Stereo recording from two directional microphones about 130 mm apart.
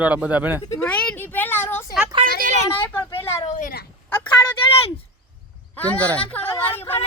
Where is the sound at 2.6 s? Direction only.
15° left (ahead or behind).